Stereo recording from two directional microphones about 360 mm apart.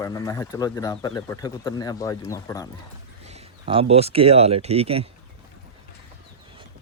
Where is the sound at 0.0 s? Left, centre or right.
Centre.